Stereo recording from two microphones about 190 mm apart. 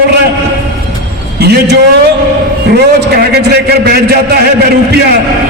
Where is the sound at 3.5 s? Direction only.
55° right (ahead or behind).